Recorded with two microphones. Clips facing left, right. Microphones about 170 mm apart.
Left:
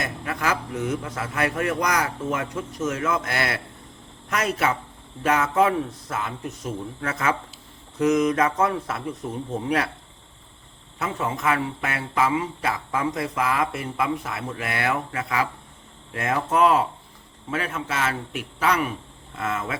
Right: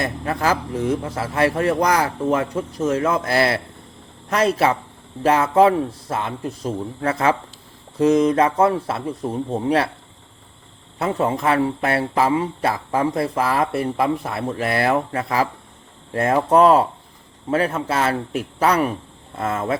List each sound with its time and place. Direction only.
0.0 s speech: 35° right (ahead or behind)
10.9 s speech: 35° right (ahead or behind)